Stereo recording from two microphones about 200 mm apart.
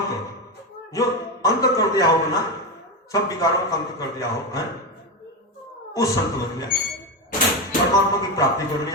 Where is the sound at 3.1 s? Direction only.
15° left (ahead or behind).